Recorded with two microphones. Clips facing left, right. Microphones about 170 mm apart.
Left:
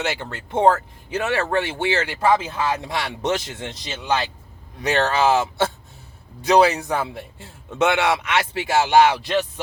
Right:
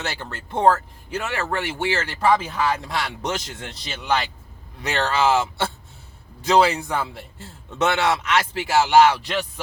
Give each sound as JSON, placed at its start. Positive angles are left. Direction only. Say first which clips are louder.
{"t": 0.0, "sound": "a man's voice", "louder": "left 4 dB", "side_deg": 20}
{"t": 6.4, "sound": "a man's voice", "louder": "left 2 dB", "side_deg": 20}